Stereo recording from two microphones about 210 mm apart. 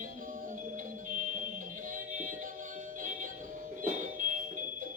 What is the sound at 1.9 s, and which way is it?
Music, 40° right (ahead or behind).